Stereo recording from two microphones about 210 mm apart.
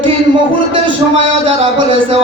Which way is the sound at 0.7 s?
25° right (ahead or behind).